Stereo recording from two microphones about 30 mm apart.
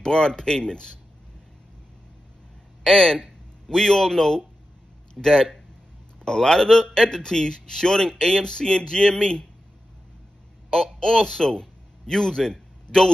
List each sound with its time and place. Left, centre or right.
0.0 s a man's voice: left
2.8 s a man's voice: centre
10.7 s a man's voice: left